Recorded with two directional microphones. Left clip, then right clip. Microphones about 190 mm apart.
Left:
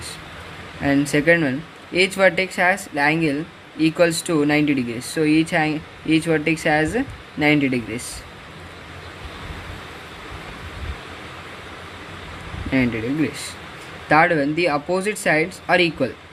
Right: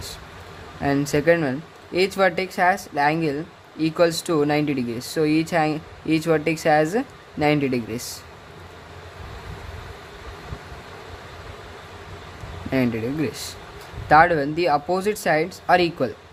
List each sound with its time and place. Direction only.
0.8 s speech: 25° right (ahead or behind)
2.6 s speech: 25° right (ahead or behind)
3.0 s speech: 35° right (ahead or behind)
12.7 s speech: 35° right (ahead or behind)
15.0 s speech: 25° right (ahead or behind)